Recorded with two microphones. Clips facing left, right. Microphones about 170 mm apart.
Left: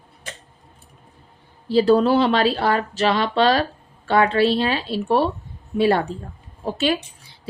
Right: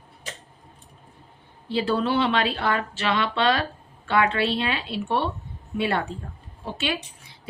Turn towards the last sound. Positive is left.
turn(degrees=35)  # may be behind; listen again after turning